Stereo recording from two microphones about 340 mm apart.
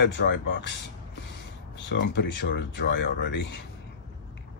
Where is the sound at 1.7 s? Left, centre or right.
Left.